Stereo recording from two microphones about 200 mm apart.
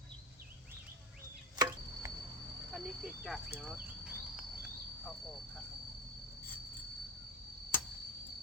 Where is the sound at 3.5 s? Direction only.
10° right (ahead or behind).